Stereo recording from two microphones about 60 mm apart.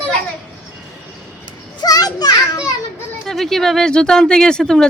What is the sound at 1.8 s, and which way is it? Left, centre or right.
Children playing, left.